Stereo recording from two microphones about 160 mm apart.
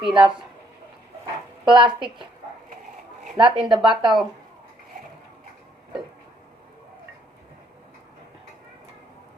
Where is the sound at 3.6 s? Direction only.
5° right (ahead or behind).